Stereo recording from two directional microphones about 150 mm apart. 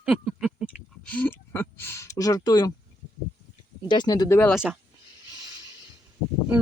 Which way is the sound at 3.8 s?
30° left (ahead or behind).